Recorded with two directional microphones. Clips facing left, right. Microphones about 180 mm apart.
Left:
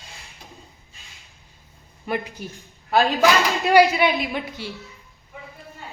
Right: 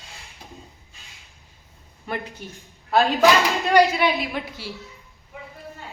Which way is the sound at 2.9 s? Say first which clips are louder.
Right 1 dB; centre (ahead or behind).